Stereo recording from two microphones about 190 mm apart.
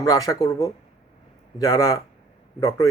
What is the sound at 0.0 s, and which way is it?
Speech, 20° left (ahead or behind).